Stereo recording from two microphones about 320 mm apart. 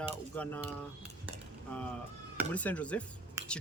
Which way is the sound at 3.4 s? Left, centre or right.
Centre.